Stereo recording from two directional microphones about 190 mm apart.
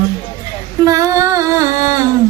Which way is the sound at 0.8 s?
20° right (ahead or behind).